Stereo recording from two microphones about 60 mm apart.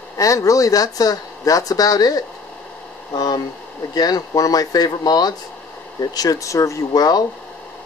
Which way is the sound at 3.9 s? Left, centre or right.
Left.